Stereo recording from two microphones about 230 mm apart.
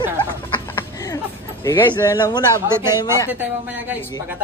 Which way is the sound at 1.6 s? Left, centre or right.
Centre.